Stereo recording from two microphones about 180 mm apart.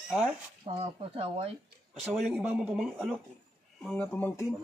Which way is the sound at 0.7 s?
35° right (ahead or behind).